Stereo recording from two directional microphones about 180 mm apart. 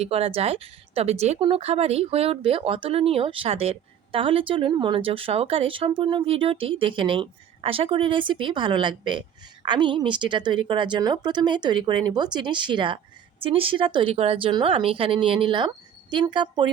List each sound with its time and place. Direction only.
0.0 s a woman's voice: 35° right (ahead or behind)